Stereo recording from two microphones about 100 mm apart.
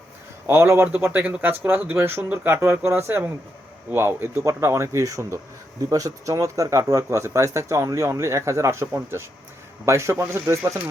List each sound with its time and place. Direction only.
0.4 s speech: 25° right (ahead or behind)